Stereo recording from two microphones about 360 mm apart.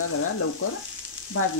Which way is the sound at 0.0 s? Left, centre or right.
Left.